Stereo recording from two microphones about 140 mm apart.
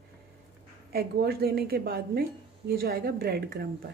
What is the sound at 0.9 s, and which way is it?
A woman's voice, 90° right.